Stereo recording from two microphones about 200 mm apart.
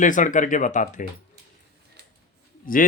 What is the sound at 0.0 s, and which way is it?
Speech, 40° left (ahead or behind).